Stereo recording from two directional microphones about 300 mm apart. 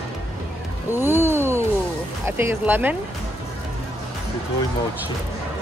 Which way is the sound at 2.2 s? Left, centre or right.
Centre.